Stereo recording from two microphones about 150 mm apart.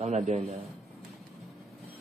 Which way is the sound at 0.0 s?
50° right (ahead or behind).